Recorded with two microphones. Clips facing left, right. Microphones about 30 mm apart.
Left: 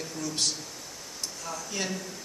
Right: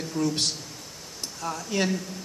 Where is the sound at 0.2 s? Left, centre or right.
Right.